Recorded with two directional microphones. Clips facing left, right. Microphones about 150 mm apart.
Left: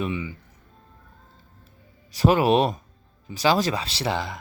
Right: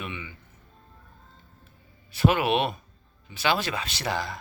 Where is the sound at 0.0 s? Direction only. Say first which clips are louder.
Left 9 dB; 35° left (ahead or behind).